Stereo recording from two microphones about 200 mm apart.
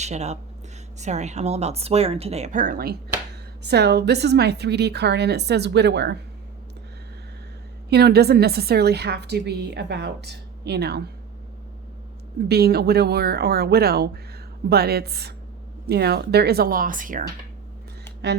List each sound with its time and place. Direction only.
0.0 s a woman's voice: 35° right (ahead or behind)
3.6 s a woman's voice: 55° right (ahead or behind)
7.9 s a woman's voice: 55° right (ahead or behind)
12.5 s speech: 50° right (ahead or behind)